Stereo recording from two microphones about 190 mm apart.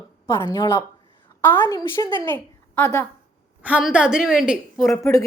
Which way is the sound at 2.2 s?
10° left (ahead or behind).